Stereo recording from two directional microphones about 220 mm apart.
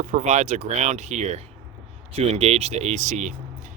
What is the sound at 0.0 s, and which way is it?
Speech, 30° right (ahead or behind).